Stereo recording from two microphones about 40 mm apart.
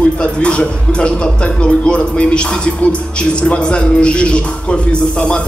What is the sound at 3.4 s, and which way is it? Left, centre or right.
Speech, left.